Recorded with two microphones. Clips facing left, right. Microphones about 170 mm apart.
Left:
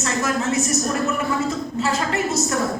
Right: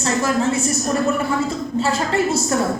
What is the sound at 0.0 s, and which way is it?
Speech, 30° right (ahead or behind).